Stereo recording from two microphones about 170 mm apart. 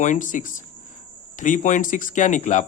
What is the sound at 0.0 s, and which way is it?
A man's voice, 45° left (ahead or behind).